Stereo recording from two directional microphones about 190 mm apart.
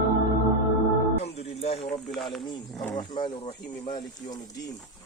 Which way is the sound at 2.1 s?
Centre (ahead or behind).